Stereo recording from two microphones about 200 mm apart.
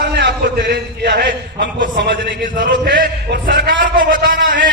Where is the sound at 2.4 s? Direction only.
45° right (ahead or behind).